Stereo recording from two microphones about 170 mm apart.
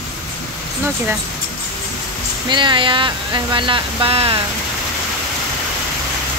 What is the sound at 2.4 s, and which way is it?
Speech, 30° right (ahead or behind).